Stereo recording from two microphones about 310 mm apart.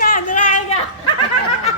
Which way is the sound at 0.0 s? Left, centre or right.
Left.